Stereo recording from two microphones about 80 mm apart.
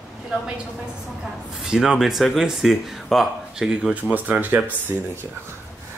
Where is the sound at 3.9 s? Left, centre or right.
Right.